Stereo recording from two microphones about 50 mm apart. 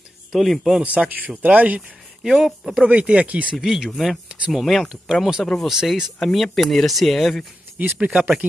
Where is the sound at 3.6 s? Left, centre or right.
Centre.